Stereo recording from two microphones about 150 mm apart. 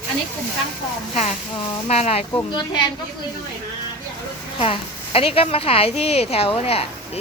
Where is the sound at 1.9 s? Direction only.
45° left (ahead or behind).